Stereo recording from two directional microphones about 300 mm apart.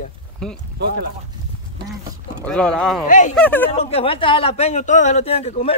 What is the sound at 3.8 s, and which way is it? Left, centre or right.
A man's voice, centre.